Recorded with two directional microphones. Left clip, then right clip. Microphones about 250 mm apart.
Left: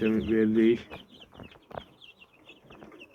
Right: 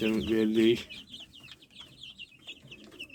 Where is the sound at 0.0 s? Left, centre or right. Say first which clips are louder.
Left 2 dB; centre.